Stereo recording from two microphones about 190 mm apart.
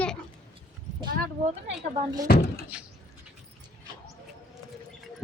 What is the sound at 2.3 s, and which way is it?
Speech, 55° left (ahead or behind).